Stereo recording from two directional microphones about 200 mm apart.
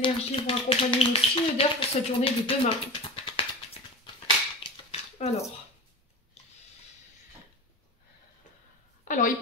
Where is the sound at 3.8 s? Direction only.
30° left (ahead or behind).